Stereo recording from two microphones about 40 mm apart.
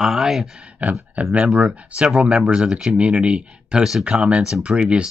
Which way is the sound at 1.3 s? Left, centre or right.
Right.